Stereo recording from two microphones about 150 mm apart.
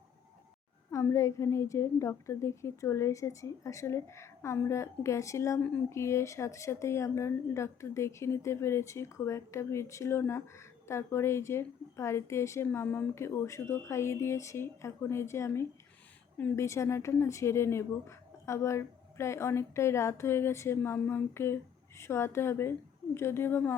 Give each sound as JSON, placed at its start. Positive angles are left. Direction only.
{"t": 0.9, "sound": "a woman's voice", "side_deg": 20}